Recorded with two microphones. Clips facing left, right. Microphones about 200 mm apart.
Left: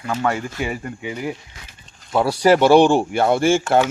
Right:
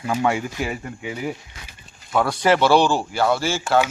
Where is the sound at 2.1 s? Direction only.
35° left (ahead or behind); by 3.6 s 50° left (ahead or behind).